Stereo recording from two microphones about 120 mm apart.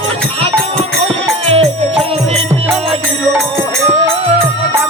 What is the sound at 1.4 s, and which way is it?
Music, 55° right (ahead or behind).